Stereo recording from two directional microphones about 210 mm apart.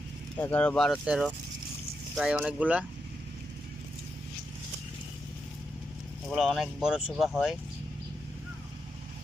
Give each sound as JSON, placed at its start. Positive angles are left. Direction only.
{"t": 0.3, "sound": "speech", "side_deg": 10}
{"t": 6.2, "sound": "speech", "side_deg": 0}